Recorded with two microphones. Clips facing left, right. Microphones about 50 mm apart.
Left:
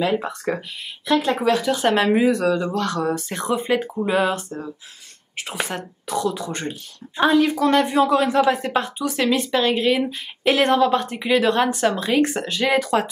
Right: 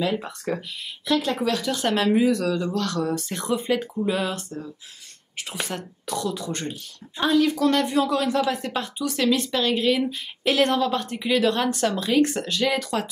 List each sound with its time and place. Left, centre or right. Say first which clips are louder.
0.0 s speech: left 4 dB; centre